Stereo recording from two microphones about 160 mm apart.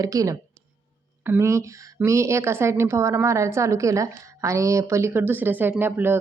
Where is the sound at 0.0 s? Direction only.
20° right (ahead or behind).